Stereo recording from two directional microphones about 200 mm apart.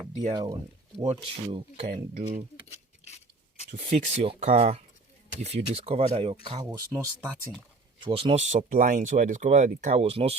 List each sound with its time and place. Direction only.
0.3 s speech: 20° right (ahead or behind)
3.0 s a sound: 35° left (ahead or behind)
3.7 s speech: 35° right (ahead or behind); by 7.3 s 15° right (ahead or behind)
8.0 s speech: 25° right (ahead or behind)